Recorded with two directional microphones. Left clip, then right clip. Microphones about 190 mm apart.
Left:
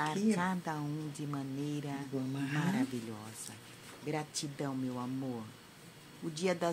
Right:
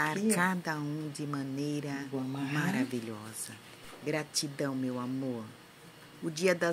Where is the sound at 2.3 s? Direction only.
15° left (ahead or behind).